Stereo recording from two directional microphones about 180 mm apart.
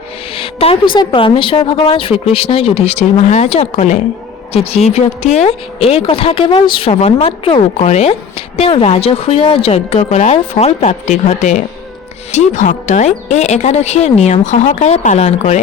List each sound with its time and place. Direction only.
0.3 s speech: 30° left (ahead or behind)